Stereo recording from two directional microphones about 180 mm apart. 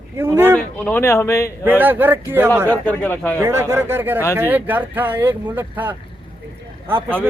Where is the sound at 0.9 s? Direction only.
15° left (ahead or behind).